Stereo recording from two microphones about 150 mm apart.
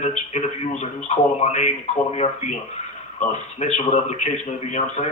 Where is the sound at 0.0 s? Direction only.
45° left (ahead or behind).